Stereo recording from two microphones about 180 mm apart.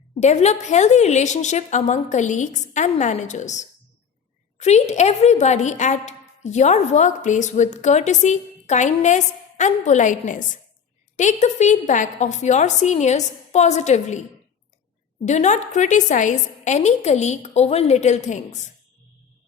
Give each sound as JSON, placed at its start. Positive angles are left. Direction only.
{"t": 0.2, "sound": "a woman's voice", "side_deg": 40}